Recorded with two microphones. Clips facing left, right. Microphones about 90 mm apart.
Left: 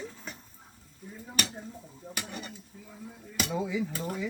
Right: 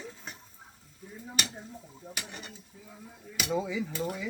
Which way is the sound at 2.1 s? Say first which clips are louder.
Left 4 dB; 45° left (ahead or behind).